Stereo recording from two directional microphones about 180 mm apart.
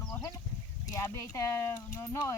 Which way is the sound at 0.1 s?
20° left (ahead or behind).